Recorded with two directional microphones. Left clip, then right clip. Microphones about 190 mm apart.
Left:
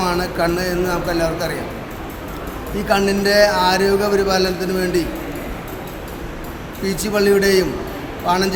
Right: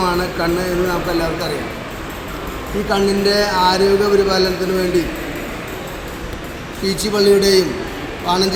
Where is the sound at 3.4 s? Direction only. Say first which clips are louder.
Left 1 dB; 25° left (ahead or behind).